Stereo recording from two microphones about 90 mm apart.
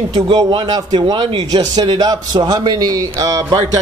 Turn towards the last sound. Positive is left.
turn(degrees=-35)  # may be behind; listen again after turning